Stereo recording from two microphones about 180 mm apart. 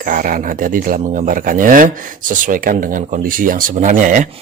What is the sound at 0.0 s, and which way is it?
Speech, 50° right (ahead or behind).